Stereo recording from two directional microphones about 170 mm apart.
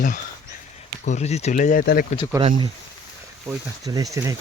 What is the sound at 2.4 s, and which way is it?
Speech, 30° right (ahead or behind).